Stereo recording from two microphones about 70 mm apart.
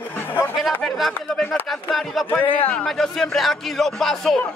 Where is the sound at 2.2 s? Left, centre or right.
Left.